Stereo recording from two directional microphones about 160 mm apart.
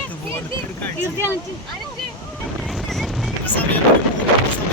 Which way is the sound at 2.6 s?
Centre (ahead or behind).